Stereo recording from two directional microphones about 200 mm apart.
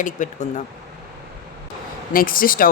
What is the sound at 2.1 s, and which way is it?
Speech, 45° left (ahead or behind).